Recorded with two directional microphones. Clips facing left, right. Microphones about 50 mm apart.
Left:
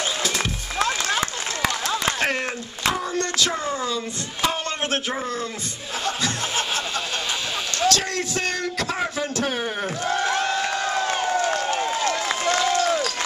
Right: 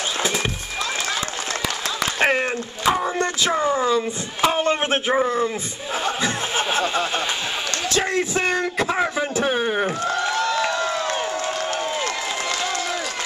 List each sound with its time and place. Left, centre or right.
2.1 s speech: centre
6.0 s snicker: centre
7.9 s a man's voice: centre